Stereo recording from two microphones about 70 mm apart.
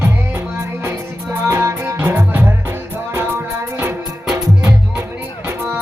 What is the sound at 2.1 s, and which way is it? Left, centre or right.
Music, right.